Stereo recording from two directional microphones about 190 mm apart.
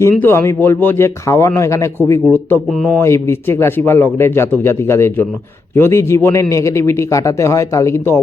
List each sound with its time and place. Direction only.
0.0 s speech: 15° left (ahead or behind)